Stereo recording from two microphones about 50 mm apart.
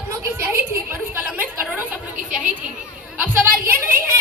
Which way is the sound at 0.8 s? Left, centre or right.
Right.